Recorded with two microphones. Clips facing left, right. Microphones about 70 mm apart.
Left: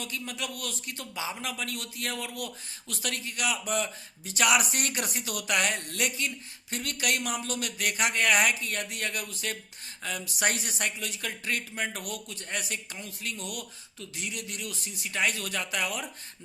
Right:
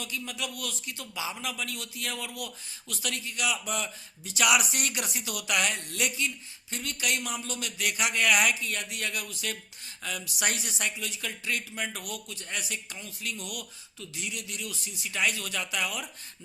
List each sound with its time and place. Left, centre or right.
0.0 s a man's voice: left